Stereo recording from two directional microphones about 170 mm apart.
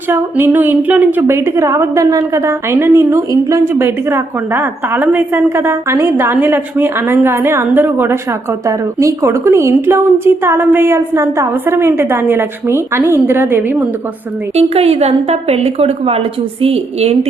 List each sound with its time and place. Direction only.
0.1 s a woman's voice: 10° right (ahead or behind)
14.5 s a woman's voice: 35° right (ahead or behind)